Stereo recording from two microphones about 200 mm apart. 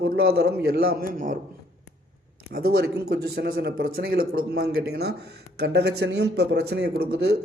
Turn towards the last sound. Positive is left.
turn(degrees=-55)  # may be behind; listen again after turning